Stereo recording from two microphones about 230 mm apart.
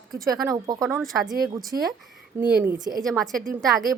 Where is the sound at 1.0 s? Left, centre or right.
Centre.